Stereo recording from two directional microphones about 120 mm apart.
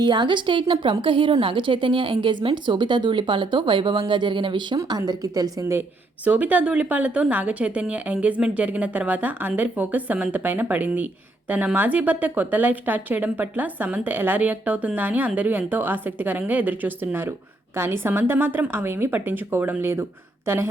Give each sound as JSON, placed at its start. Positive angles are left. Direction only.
{"t": 0.0, "sound": "a woman's voice", "side_deg": -40}
{"t": 6.2, "sound": "speech", "side_deg": -10}